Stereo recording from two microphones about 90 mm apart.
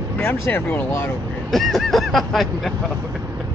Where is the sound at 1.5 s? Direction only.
Centre (ahead or behind).